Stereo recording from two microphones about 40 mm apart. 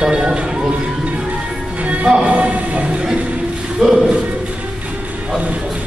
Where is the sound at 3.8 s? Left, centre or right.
Centre.